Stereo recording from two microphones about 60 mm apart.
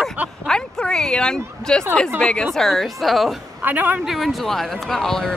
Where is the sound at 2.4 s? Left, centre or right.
Centre.